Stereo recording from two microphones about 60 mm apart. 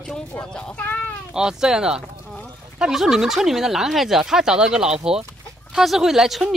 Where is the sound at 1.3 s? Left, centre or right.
Centre.